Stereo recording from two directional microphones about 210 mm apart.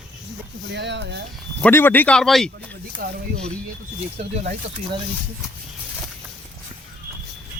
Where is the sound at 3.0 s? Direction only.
40° right (ahead or behind).